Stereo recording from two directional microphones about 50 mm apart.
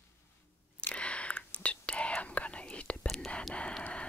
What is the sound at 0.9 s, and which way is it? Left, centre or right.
Whispering, left.